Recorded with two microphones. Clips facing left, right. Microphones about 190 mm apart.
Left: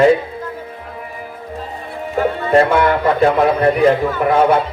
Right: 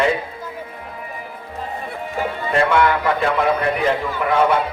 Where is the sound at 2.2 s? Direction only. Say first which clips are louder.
Left 7 dB; 40° left (ahead or behind).